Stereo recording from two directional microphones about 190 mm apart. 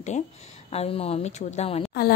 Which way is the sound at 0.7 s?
30° left (ahead or behind).